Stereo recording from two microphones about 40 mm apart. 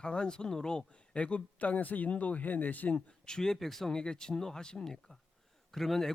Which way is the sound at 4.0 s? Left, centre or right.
Centre.